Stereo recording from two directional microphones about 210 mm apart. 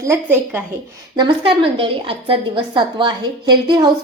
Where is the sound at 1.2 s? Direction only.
25° right (ahead or behind).